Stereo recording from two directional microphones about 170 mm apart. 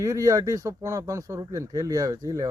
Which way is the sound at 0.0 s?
20° right (ahead or behind).